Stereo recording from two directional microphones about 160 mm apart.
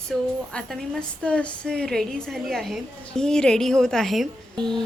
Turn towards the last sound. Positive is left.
turn(degrees=5)  # may be behind; listen again after turning